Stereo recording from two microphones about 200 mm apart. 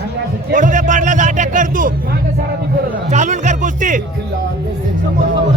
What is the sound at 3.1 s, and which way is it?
Speech, 35° right (ahead or behind).